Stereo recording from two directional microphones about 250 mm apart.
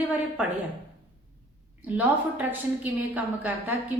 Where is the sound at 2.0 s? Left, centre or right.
Centre.